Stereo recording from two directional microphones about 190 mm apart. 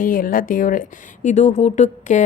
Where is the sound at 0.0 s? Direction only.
45° left (ahead or behind).